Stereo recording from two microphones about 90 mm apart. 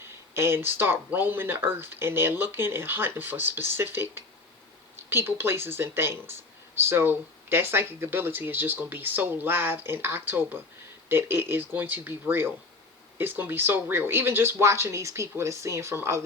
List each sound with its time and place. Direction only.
0.3 s speech: 25° right (ahead or behind)